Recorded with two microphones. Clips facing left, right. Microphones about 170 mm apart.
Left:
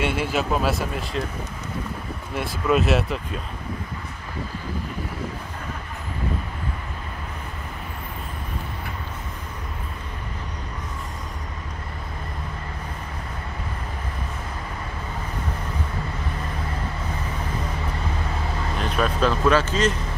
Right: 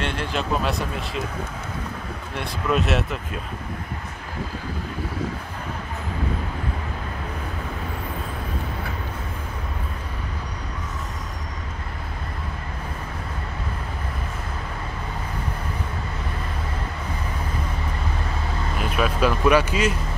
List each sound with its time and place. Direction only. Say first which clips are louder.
0.0 s speech: left 3 dB; 10° left (ahead or behind)
2.3 s speech: left 2 dB; centre (ahead or behind)
18.8 s speech: even; 5° right (ahead or behind)